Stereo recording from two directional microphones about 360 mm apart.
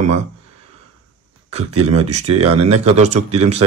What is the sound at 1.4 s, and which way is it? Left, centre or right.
Speech, centre.